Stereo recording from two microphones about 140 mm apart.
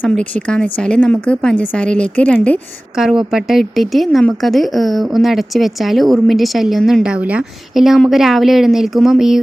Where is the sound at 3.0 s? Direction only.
5° right (ahead or behind).